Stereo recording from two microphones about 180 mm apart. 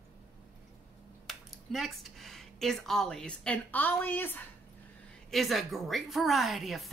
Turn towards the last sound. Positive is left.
turn(degrees=0)  # may be behind; listen again after turning